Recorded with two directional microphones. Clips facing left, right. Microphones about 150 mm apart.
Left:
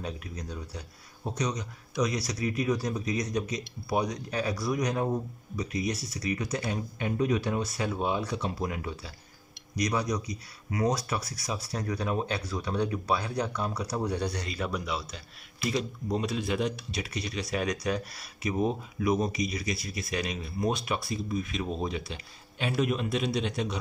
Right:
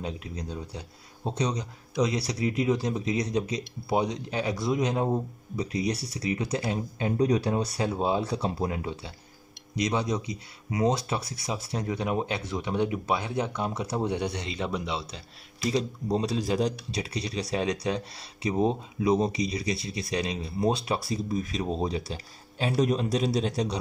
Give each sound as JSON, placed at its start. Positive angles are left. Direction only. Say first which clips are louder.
{"t": 0.0, "sound": "speech", "louder": "right 2 dB", "side_deg": -25}